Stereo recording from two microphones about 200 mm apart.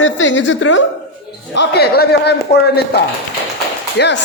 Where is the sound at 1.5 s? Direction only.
55° left (ahead or behind).